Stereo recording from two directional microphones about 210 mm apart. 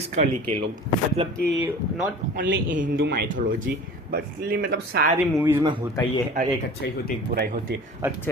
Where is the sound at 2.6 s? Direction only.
40° right (ahead or behind).